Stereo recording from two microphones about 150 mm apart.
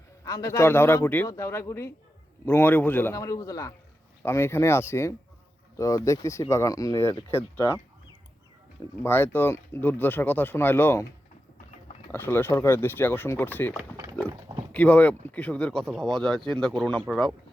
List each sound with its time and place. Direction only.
0.3 s speech: 20° left (ahead or behind)
9.0 s speech: 15° left (ahead or behind)
12.1 s speech: 15° left (ahead or behind)
13.9 s speech: 25° right (ahead or behind)
14.7 s speech: 10° left (ahead or behind)